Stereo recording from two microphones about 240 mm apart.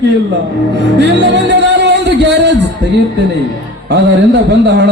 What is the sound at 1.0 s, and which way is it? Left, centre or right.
Speech, right.